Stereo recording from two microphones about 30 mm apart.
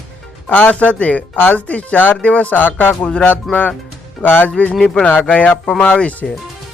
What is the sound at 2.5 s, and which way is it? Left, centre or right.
Speech, left.